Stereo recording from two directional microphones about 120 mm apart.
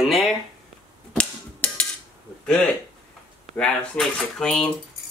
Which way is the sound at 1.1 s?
10° left (ahead or behind).